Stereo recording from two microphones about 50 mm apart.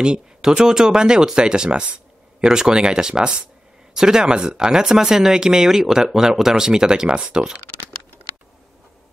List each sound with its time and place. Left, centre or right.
0.0 s speech: centre